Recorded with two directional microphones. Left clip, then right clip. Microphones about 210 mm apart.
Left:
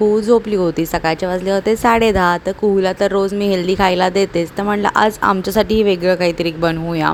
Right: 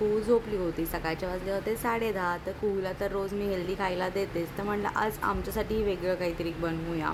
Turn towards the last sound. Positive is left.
turn(degrees=40)  # may be behind; listen again after turning